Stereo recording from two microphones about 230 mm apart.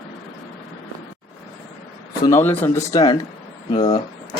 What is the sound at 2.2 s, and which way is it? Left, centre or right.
Speech, centre.